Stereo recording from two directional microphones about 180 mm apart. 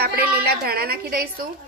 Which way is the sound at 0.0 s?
60° right (ahead or behind).